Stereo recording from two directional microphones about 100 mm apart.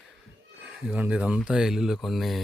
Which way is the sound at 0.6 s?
10° right (ahead or behind).